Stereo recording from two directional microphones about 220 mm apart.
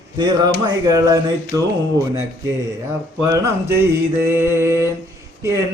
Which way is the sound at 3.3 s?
10° right (ahead or behind).